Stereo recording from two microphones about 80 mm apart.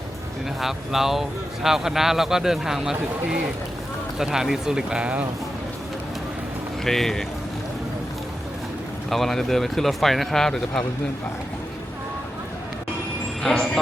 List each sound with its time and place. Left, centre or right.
0.6 s speech: centre
6.8 s speech: centre
9.0 s speech: centre
13.4 s speech: centre